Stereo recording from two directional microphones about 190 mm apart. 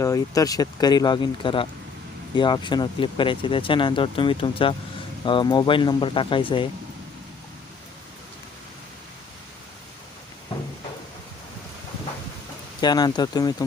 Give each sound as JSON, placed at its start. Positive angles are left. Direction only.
{"t": 0.0, "sound": "speech", "side_deg": 20}
{"t": 12.8, "sound": "speech", "side_deg": 20}